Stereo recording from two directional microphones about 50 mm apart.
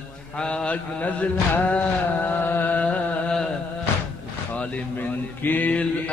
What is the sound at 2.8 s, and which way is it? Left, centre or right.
Music, left.